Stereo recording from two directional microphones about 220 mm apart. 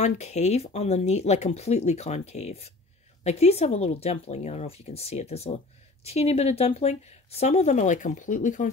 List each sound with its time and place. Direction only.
0.0 s speech: 30° left (ahead or behind)